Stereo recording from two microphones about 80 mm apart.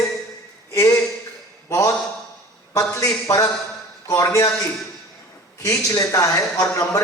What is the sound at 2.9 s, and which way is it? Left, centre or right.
A man's voice, left.